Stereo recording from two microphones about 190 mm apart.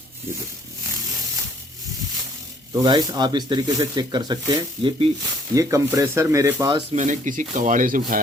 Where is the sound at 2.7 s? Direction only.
20° right (ahead or behind).